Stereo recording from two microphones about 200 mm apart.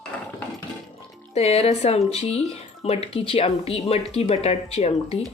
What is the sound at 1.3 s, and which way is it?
Speech, 30° left (ahead or behind).